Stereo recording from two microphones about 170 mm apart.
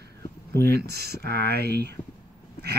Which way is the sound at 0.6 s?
70° right (ahead or behind).